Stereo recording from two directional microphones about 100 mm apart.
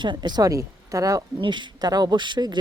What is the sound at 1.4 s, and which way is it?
Speech, 50° right (ahead or behind).